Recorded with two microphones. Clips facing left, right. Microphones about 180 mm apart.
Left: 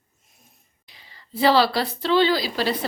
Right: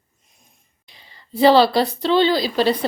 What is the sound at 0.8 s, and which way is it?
A woman's voice, 25° right (ahead or behind).